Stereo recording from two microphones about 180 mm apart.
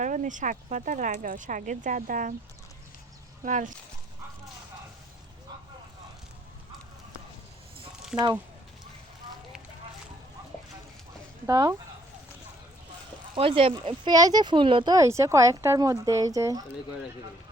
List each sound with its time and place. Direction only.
0.0 s speech: 45° right (ahead or behind)
3.4 s speech: 45° right (ahead or behind)
11.4 s speech: 20° right (ahead or behind)
13.3 s speech: 30° right (ahead or behind)
14.9 s speech: 15° right (ahead or behind)